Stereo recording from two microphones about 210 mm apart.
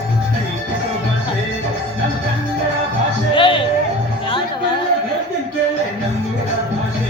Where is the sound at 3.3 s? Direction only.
25° left (ahead or behind).